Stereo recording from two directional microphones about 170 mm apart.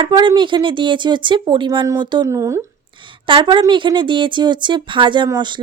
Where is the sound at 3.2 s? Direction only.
30° right (ahead or behind).